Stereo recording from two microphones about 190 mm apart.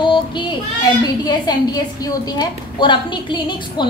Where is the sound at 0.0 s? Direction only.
25° left (ahead or behind).